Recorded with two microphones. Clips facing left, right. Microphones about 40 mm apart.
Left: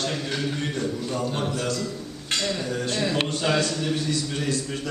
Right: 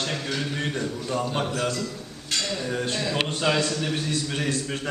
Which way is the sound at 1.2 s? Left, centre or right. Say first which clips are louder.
Right 2 dB; centre.